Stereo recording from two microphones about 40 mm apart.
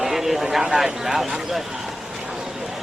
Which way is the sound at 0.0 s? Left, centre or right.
Centre.